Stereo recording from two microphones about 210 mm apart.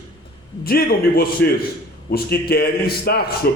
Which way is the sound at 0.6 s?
45° left (ahead or behind).